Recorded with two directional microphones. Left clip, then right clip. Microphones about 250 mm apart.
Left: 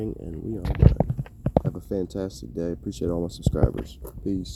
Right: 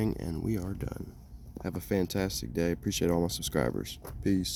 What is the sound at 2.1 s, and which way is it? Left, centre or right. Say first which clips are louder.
Speech: left 1 dB; right.